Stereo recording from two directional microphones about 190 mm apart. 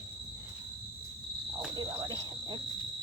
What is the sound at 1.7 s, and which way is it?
Cricket, 20° right (ahead or behind).